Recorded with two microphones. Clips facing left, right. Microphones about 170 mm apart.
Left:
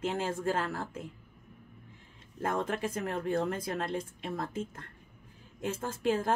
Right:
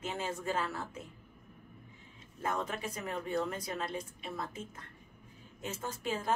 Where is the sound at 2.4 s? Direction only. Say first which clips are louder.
Left 4 dB; 55° left (ahead or behind).